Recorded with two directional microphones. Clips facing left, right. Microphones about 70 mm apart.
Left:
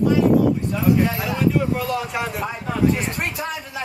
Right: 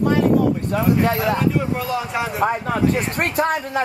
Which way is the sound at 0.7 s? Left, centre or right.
Right.